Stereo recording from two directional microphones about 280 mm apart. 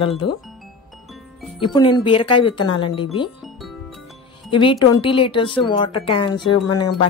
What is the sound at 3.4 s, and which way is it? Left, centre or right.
Music, centre.